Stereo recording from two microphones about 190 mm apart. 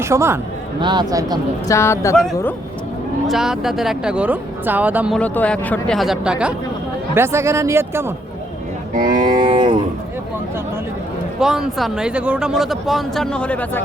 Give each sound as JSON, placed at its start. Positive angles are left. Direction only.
{"t": 0.0, "sound": "a man's voice", "side_deg": -15}
{"t": 1.6, "sound": "speech", "side_deg": 15}
{"t": 3.2, "sound": "speech", "side_deg": 0}
{"t": 5.1, "sound": "speech", "side_deg": 5}
{"t": 9.0, "sound": "speech", "side_deg": -45}
{"t": 9.2, "sound": "a man's voice", "side_deg": -25}
{"t": 11.3, "sound": "speech", "side_deg": -5}